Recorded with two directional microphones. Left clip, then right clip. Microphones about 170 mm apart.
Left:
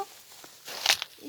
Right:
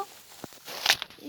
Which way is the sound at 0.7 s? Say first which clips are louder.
Right 1 dB; 10° left (ahead or behind).